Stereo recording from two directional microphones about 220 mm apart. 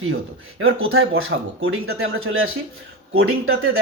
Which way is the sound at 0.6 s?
70° right (ahead or behind).